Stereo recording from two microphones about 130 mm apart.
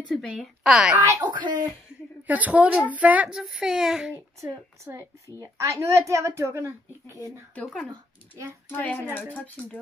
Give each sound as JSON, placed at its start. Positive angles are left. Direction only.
{"t": 0.1, "sound": "a woman's voice", "side_deg": -5}
{"t": 1.3, "sound": "speech", "side_deg": -35}
{"t": 2.2, "sound": "a child's voice", "side_deg": -10}
{"t": 4.8, "sound": "a woman's voice", "side_deg": -25}
{"t": 8.6, "sound": "speech", "side_deg": 15}